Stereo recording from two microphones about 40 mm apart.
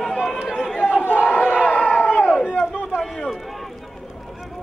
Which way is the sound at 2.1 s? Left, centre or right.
Left.